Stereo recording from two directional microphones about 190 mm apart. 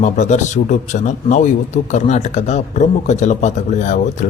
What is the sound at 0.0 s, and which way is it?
A man's voice, 40° left (ahead or behind).